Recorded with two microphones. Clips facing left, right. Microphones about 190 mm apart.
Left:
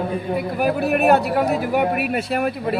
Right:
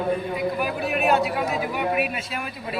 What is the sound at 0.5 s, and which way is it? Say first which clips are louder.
A man's voice: left 6 dB; 60° left (ahead or behind).